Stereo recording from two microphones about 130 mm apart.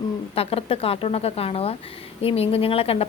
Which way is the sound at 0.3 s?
50° left (ahead or behind).